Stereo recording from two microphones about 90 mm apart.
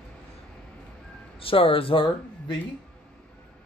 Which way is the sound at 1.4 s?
90° left.